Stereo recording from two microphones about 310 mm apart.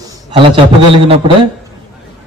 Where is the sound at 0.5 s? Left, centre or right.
Centre.